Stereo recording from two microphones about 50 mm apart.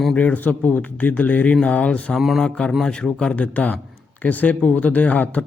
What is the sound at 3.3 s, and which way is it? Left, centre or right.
Speech, left.